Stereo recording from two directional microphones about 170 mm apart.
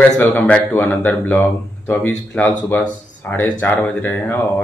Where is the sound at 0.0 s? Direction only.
10° left (ahead or behind).